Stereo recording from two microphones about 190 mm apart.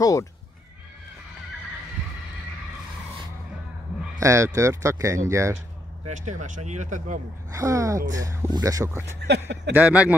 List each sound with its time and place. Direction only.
0.0 s speech: 15° left (ahead or behind)
4.2 s speech: 15° right (ahead or behind)
6.0 s speech: 40° right (ahead or behind)
7.5 s speech: 15° right (ahead or behind)